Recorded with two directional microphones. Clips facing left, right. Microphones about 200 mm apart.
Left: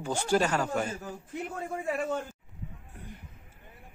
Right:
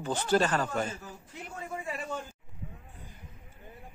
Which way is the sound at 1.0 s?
50° left (ahead or behind).